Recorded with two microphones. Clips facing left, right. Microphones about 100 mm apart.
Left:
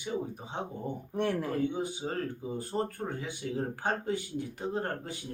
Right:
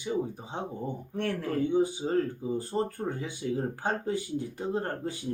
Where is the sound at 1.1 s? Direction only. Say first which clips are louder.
Left 2 dB; 15° left (ahead or behind).